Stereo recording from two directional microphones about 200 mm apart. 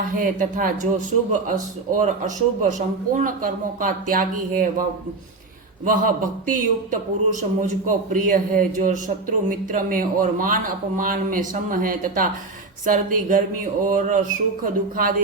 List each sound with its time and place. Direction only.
0.2 s speech: 45° right (ahead or behind)